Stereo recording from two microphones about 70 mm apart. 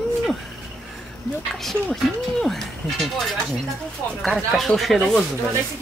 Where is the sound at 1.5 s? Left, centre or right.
Centre.